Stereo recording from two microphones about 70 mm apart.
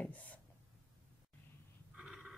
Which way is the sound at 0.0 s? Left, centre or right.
Left.